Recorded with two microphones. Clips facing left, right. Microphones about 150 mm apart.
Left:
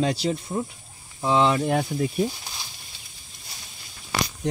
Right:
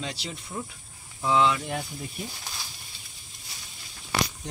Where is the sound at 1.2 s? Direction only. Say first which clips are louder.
Left 2 dB; 25° left (ahead or behind).